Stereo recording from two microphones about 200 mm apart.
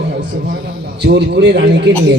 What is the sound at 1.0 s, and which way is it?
Speech, 60° right (ahead or behind).